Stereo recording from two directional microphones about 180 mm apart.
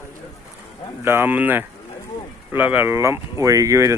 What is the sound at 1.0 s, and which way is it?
Speech, 10° right (ahead or behind).